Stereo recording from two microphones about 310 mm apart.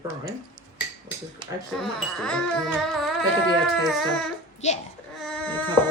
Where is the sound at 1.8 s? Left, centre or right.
Centre.